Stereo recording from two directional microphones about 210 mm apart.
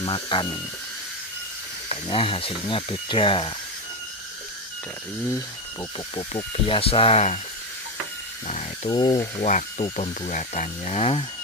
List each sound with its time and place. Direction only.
0.0 s speech: 25° left (ahead or behind)
1.9 s speech: 25° left (ahead or behind)
6.1 s speech: 30° left (ahead or behind)
8.5 s speech: 30° left (ahead or behind)